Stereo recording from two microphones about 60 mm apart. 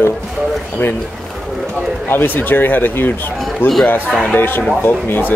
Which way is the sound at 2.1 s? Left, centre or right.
Left.